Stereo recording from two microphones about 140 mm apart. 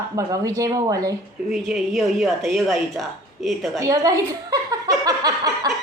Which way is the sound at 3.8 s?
25° right (ahead or behind).